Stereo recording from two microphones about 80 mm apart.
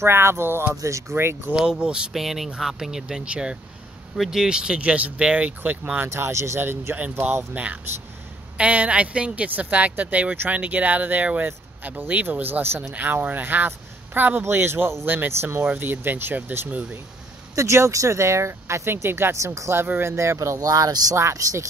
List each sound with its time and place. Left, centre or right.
0.0 s speech: right
0.7 s speech: right
1.5 s speech: centre
6.0 s speech: right
17.6 s speech: right